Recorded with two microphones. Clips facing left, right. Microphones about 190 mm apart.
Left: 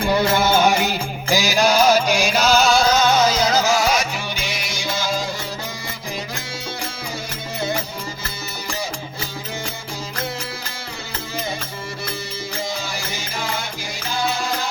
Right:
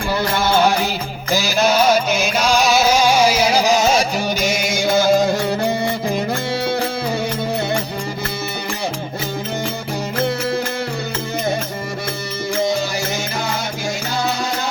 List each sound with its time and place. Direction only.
0.3 s music: 5° left (ahead or behind)
2.0 s music: 5° right (ahead or behind); by 4.0 s 25° right (ahead or behind)
4.4 s music: 45° right (ahead or behind); by 5.7 s 65° right (ahead or behind)